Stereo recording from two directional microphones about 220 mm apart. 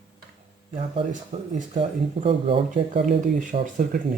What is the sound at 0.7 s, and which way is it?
Speech, 30° right (ahead or behind).